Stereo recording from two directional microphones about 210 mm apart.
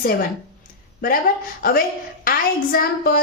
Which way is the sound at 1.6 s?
45° left (ahead or behind).